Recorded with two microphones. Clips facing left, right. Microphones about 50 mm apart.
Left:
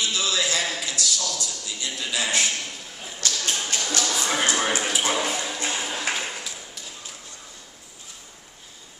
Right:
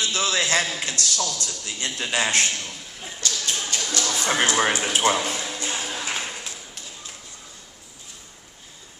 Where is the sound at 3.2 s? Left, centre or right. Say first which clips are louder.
Left 1 dB; left.